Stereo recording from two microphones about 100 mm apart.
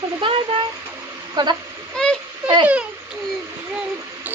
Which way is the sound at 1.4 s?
45° right (ahead or behind).